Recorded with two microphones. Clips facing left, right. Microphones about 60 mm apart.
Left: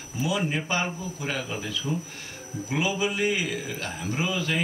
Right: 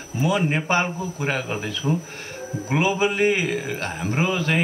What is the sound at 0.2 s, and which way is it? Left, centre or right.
A man's voice, right.